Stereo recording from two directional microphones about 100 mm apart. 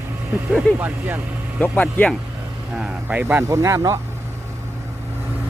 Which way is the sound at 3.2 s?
25° right (ahead or behind).